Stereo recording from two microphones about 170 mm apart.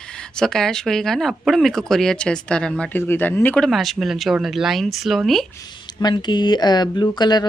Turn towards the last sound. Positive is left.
turn(degrees=25)  # may be behind; listen again after turning